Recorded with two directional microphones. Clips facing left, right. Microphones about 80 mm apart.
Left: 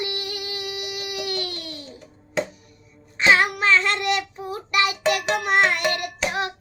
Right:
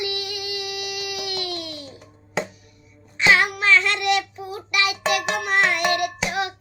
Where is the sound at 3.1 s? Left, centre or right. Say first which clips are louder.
Even; left.